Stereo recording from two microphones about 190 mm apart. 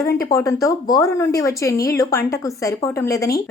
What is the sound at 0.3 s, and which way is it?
Speech, 15° left (ahead or behind).